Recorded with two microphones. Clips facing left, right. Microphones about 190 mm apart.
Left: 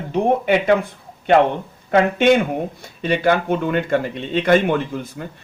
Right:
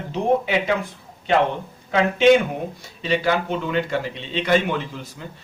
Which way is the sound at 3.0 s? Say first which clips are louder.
Left 4 dB; 55° left (ahead or behind).